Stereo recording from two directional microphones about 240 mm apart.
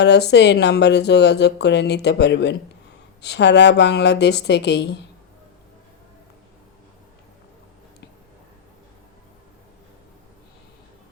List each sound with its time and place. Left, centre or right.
0.0 s speech: left